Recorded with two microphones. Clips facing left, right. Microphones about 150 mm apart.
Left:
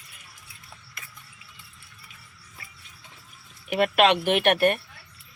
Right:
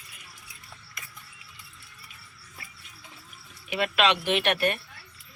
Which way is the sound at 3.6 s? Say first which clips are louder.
Left 5 dB; 50° left (ahead or behind).